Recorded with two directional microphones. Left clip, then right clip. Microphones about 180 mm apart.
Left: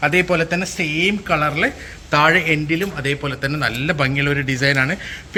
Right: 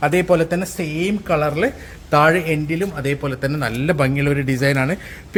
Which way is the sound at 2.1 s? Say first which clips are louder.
Even; 40° right (ahead or behind).